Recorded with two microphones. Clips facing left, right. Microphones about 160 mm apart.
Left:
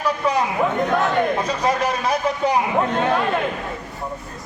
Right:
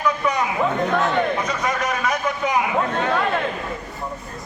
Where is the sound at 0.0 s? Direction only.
35° left (ahead or behind).